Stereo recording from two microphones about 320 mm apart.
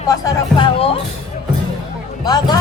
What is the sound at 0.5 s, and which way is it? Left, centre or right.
Music, centre.